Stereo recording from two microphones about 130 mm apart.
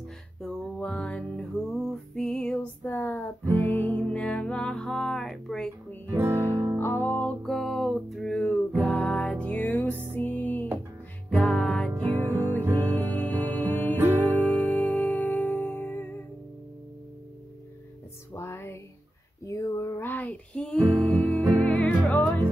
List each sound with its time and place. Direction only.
0.4 s music: 5° left (ahead or behind)
6.0 s music: 20° right (ahead or behind)
6.8 s music: 15° left (ahead or behind)
11.9 s music: 20° right (ahead or behind)
12.9 s music: 10° left (ahead or behind)
13.9 s music: 15° right (ahead or behind)
14.3 s music: 10° left (ahead or behind)
18.3 s music: 20° left (ahead or behind)